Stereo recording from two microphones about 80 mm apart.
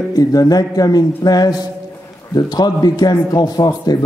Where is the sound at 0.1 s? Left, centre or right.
Left.